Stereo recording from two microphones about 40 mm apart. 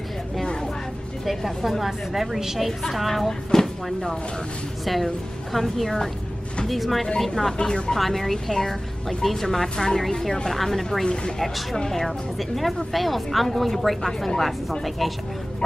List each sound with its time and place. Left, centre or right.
1.2 s speech: centre
3.3 s speech: centre
7.5 s speech: left
8.0 s speech: centre